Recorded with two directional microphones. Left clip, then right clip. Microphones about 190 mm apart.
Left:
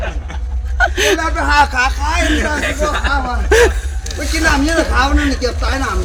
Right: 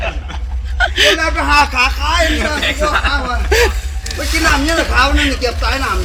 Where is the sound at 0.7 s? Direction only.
40° left (ahead or behind).